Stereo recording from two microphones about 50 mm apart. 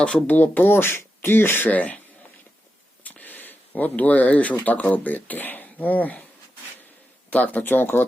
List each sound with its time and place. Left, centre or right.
0.3 s speech: left
1.7 s speech: left
3.0 s a sound: left
4.6 s speech: left
7.3 s speech: left